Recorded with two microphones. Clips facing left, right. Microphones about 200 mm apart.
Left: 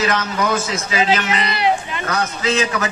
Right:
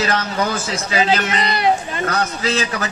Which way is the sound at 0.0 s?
30° right (ahead or behind).